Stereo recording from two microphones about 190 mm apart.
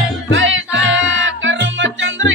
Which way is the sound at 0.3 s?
85° right.